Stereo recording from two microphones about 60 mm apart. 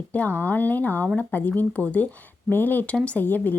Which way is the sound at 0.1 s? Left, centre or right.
Left.